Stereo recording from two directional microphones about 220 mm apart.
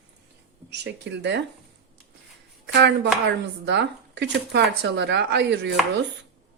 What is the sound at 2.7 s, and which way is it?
Speech, 50° right (ahead or behind).